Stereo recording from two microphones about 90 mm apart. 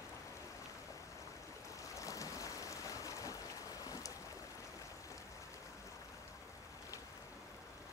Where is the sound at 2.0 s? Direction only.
35° left (ahead or behind).